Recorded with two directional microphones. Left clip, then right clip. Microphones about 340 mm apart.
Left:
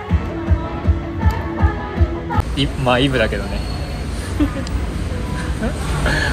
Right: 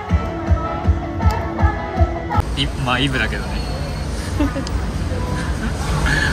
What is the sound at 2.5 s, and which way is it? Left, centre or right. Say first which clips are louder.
Speech: left 6 dB; centre.